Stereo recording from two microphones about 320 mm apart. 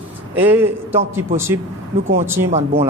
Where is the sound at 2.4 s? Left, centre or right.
Centre.